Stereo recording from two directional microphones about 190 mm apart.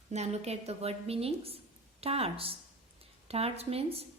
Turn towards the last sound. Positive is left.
turn(degrees=-30)  # may be behind; listen again after turning